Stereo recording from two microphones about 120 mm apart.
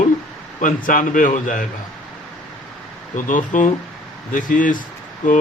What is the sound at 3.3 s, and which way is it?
Speech, 90° left.